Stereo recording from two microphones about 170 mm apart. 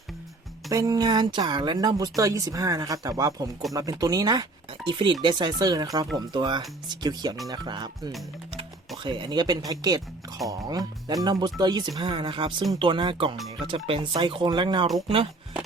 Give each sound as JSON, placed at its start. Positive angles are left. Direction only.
{"t": 0.7, "sound": "speech", "side_deg": -20}